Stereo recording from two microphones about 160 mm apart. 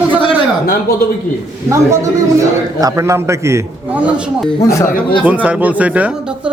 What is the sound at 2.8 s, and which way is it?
A man's voice, 20° right (ahead or behind).